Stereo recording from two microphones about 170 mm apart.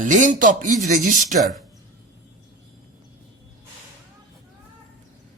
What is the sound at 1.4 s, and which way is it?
Speech, centre (ahead or behind).